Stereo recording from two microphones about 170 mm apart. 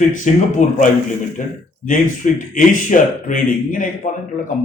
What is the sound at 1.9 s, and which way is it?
Speech, 50° left (ahead or behind).